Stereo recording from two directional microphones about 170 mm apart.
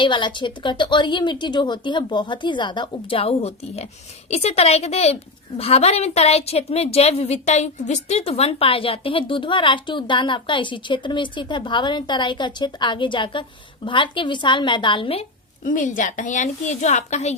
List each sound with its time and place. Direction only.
0.0 s a woman's voice: 30° left (ahead or behind)
15.6 s a woman's voice: 50° left (ahead or behind)